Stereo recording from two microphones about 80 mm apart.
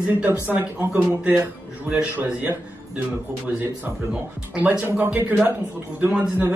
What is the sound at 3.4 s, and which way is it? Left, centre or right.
A man's voice, right.